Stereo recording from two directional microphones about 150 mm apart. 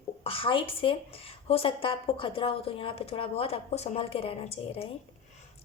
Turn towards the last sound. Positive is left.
turn(degrees=40)  # may be behind; listen again after turning